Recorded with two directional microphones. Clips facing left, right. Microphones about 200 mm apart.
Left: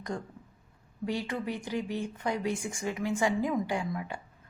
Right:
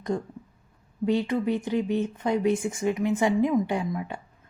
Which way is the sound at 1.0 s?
20° right (ahead or behind).